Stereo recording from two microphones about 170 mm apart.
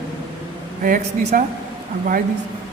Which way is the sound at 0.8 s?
55° right (ahead or behind).